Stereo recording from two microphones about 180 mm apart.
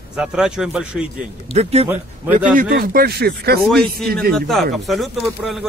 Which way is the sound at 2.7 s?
55° right (ahead or behind).